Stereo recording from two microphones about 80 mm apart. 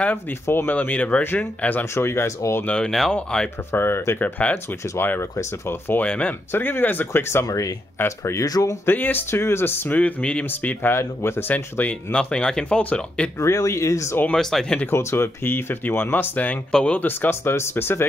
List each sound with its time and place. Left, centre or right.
0.0 s speech: left
2.0 s speech: left
2.6 s speech: centre
3.7 s speech: left
4.2 s speech: centre
6.0 s speech: centre
6.5 s speech: left
7.4 s speech: left
8.8 s speech: left
11.5 s speech: centre
13.4 s speech: left
14.3 s speech: centre
14.9 s speech: left